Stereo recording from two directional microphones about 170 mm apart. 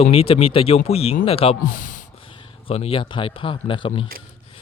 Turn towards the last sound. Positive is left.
turn(degrees=30)  # may be behind; listen again after turning